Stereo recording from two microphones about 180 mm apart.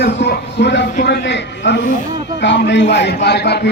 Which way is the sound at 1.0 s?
70° left (ahead or behind).